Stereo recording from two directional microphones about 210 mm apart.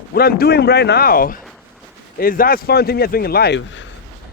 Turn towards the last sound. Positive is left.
turn(degrees=60)  # may be behind; listen again after turning